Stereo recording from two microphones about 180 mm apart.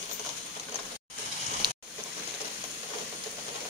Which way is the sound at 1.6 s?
25° right (ahead or behind).